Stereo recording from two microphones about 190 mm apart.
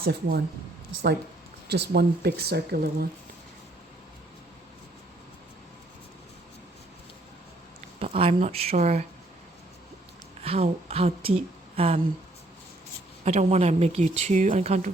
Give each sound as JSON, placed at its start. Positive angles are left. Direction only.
{"t": 0.0, "sound": "speech", "side_deg": -55}
{"t": 1.6, "sound": "speech", "side_deg": -60}
{"t": 7.9, "sound": "a woman's voice", "side_deg": -35}
{"t": 10.4, "sound": "a woman's voice", "side_deg": -30}
{"t": 13.2, "sound": "a woman's voice", "side_deg": -35}